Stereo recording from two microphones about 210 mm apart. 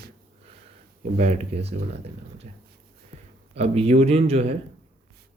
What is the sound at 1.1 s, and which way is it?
Speech, 30° right (ahead or behind).